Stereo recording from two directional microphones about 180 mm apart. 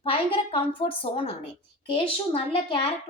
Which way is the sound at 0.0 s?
30° left (ahead or behind).